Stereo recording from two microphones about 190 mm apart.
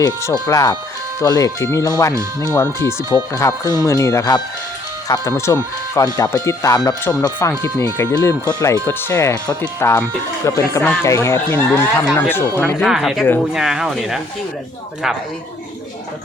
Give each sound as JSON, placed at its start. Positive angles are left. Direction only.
{"t": 0.0, "sound": "speech", "side_deg": 15}
{"t": 2.6, "sound": "speech", "side_deg": -20}
{"t": 3.1, "sound": "speech", "side_deg": 15}
{"t": 12.8, "sound": "speech", "side_deg": 0}